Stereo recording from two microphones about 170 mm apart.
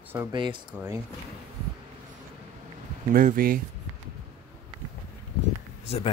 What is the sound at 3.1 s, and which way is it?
Speech, 55° right (ahead or behind).